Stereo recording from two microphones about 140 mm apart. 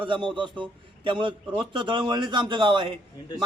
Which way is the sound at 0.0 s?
35° right (ahead or behind).